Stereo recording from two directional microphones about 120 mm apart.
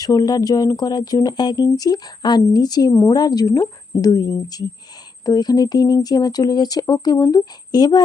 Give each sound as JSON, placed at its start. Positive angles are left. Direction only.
{"t": 0.0, "sound": "speech", "side_deg": 30}